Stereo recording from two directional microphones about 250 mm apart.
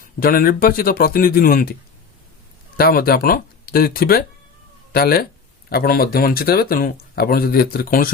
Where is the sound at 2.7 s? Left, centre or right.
Left.